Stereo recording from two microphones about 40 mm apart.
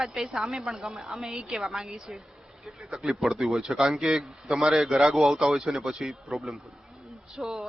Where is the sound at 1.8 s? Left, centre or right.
Centre.